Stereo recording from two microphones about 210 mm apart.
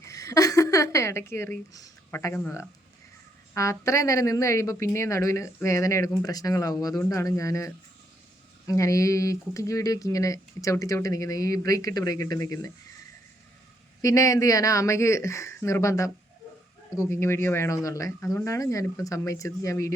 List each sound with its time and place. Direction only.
0.0 s a sound: 15° left (ahead or behind)
3.5 s speech: 15° left (ahead or behind)
14.0 s speech: 15° left (ahead or behind)